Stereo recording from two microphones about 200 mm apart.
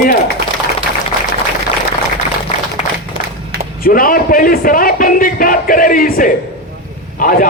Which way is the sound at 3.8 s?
45° left (ahead or behind).